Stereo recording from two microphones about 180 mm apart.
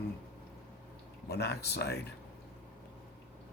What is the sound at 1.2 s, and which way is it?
Speech, 65° left (ahead or behind).